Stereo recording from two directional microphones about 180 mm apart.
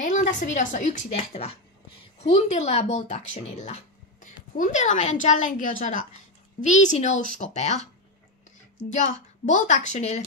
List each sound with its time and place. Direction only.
0.0 s a woman's voice: 40° left (ahead or behind)
8.9 s a woman's voice: 40° left (ahead or behind)